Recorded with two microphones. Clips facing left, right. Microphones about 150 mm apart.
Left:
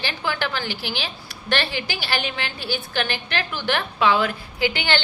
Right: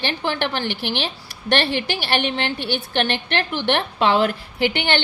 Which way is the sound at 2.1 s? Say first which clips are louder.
Right 6 dB; 25° right (ahead or behind).